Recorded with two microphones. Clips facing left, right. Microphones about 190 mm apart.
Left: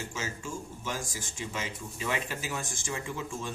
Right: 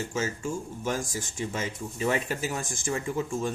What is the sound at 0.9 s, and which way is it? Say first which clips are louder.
Speech: right 7 dB; 45° right (ahead or behind).